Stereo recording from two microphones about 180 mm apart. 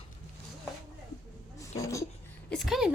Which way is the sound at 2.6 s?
5° right (ahead or behind).